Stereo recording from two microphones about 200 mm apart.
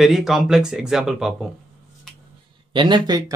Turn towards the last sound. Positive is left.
turn(degrees=-25)  # may be behind; listen again after turning